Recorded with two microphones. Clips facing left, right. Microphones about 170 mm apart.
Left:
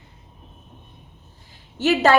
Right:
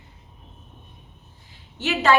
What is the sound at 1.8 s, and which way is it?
Speech, 40° left (ahead or behind).